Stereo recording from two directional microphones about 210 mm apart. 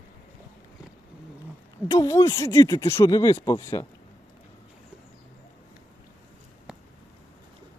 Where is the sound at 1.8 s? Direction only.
15° left (ahead or behind).